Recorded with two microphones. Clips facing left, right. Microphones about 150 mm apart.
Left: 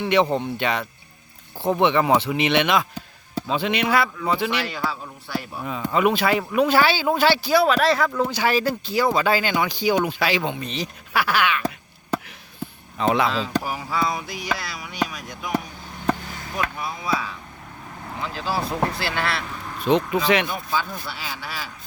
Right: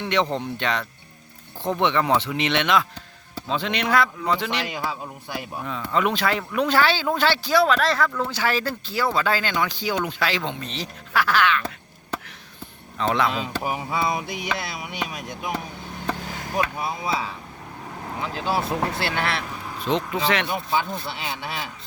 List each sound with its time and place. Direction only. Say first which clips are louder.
0.0 s a man's voice: left 4 dB; 10° left (ahead or behind)
4.6 s a man's voice: left 1 dB; 15° right (ahead or behind)
5.6 s a man's voice: left 3 dB; 10° left (ahead or behind)
13.0 s a man's voice: left 2 dB; 10° left (ahead or behind)
13.7 s speech: even; 20° right (ahead or behind)
16.8 s speech: even; 25° right (ahead or behind)
19.8 s a man's voice: left 4 dB; 10° left (ahead or behind)
20.5 s speech: right 2 dB; 20° right (ahead or behind)